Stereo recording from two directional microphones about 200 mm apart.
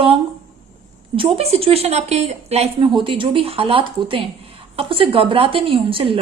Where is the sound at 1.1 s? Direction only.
30° right (ahead or behind).